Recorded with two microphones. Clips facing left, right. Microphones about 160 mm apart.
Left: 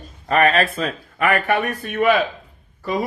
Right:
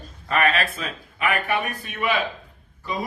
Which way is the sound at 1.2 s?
60° left (ahead or behind).